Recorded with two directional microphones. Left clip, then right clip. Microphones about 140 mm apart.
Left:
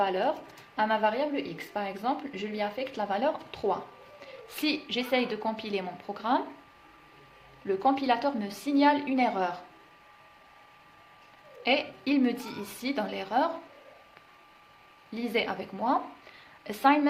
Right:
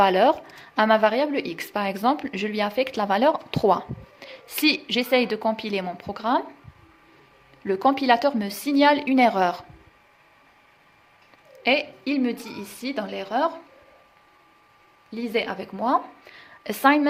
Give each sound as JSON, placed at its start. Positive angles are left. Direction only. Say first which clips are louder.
{"t": 0.0, "sound": "speech", "louder": "right 10 dB", "side_deg": -90}
{"t": 7.7, "sound": "a woman's voice", "louder": "right 6 dB", "side_deg": -60}
{"t": 11.6, "sound": "a woman's voice", "louder": "right 5 dB", "side_deg": -50}
{"t": 12.0, "sound": "a woman's voice", "louder": "right 2 dB", "side_deg": -30}
{"t": 15.1, "sound": "a woman's voice", "louder": "right 4 dB", "side_deg": -25}